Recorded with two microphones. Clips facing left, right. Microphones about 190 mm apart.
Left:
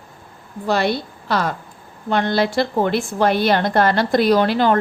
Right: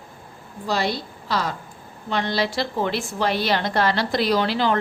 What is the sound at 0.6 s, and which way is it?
A woman's voice, 60° left (ahead or behind).